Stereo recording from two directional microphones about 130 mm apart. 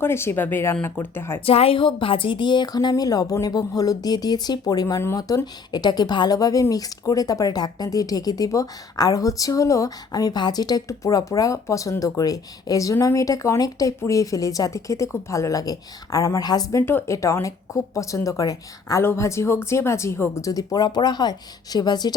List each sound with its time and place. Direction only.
0.0 s speech: 20° left (ahead or behind)
1.5 s a woman's voice: 50° left (ahead or behind); by 22.1 s 30° left (ahead or behind)